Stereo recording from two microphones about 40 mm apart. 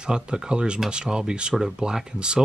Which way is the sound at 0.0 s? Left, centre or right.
Right.